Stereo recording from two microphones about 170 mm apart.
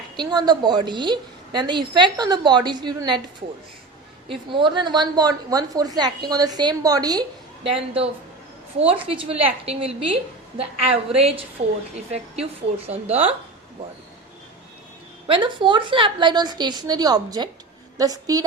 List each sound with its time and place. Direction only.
0.2 s a woman's voice: 25° right (ahead or behind)
4.3 s a woman's voice: 30° right (ahead or behind)
15.3 s a woman's voice: 30° right (ahead or behind)